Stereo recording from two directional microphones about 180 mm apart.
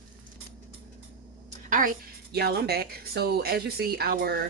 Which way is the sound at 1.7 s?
50° right (ahead or behind).